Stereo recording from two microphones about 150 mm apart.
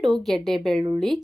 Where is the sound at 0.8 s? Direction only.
25° right (ahead or behind).